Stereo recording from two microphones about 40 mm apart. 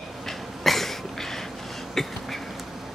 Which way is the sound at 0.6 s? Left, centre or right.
Centre.